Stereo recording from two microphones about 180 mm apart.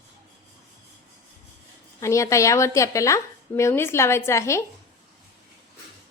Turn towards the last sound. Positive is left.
turn(degrees=15)  # may be behind; listen again after turning